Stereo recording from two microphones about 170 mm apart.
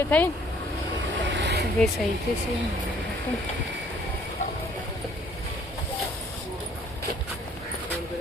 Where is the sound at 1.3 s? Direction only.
85° right.